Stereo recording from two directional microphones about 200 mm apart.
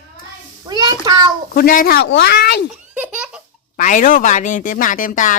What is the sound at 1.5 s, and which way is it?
Speech, 45° left (ahead or behind).